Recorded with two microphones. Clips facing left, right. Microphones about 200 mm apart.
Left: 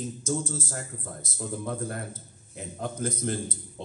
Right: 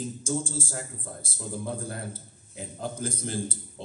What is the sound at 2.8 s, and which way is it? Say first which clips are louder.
Speech: left 2 dB; 30° right (ahead or behind).